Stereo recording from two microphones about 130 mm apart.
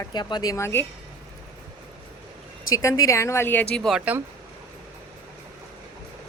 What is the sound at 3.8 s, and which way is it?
Speech, 10° right (ahead or behind).